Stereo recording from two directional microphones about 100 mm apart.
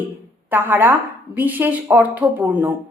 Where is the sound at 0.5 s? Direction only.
20° right (ahead or behind).